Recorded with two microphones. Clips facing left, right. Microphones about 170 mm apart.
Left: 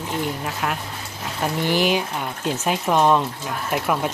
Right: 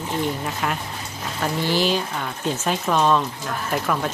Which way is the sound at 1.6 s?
15° left (ahead or behind).